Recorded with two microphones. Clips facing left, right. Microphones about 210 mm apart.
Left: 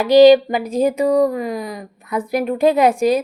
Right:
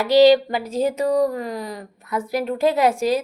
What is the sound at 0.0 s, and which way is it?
Speech, 15° left (ahead or behind).